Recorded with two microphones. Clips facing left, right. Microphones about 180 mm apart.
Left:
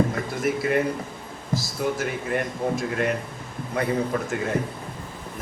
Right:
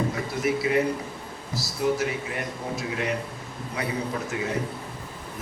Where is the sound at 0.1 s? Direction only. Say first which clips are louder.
Left 1 dB; 50° left (ahead or behind).